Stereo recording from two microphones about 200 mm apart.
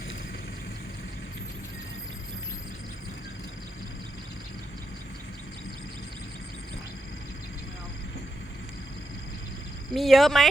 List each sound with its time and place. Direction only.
9.9 s speech: centre (ahead or behind)